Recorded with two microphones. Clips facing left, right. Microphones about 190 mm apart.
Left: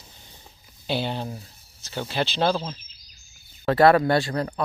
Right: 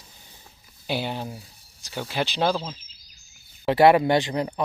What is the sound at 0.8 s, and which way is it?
Speech, 10° right (ahead or behind).